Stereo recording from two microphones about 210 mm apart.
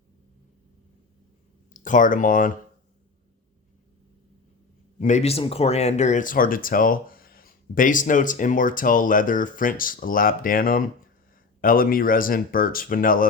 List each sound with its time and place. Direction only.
1.7 s speech: 40° left (ahead or behind)
4.9 s speech: 35° left (ahead or behind)